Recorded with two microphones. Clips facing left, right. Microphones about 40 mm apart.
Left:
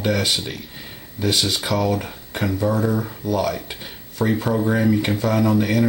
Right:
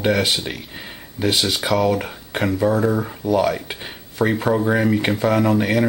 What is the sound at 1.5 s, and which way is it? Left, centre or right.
Speech, centre.